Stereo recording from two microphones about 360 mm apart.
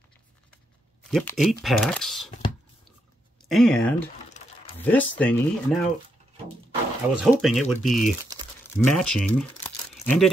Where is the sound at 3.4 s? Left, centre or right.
Centre.